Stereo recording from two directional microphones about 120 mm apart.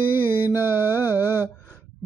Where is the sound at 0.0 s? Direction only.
15° right (ahead or behind).